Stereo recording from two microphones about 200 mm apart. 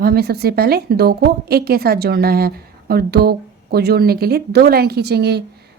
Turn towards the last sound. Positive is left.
turn(degrees=-55)  # may be behind; listen again after turning